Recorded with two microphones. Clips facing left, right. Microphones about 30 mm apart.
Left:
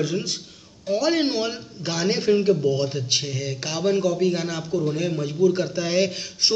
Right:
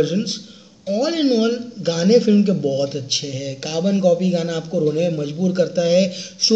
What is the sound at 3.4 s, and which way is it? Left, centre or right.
Speech, centre.